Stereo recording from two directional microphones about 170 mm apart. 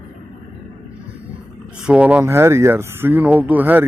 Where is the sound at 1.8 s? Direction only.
5° right (ahead or behind).